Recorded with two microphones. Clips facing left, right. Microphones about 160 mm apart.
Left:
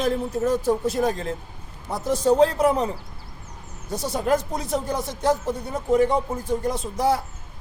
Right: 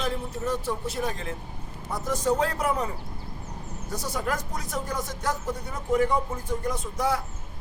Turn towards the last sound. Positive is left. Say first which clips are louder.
# left 5 dB
turn(degrees=30)  # may be behind; listen again after turning